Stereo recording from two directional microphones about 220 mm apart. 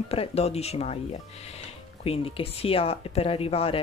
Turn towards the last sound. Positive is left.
turn(degrees=25)  # may be behind; listen again after turning